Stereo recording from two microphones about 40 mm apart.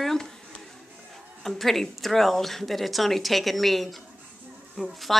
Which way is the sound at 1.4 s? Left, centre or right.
Centre.